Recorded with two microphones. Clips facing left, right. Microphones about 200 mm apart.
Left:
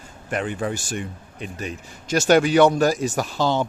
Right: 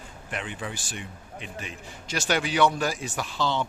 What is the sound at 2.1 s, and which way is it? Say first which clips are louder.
Speech: left 10 dB; 45° left (ahead or behind).